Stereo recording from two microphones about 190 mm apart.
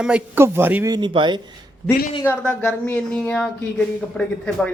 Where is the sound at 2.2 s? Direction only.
5° left (ahead or behind).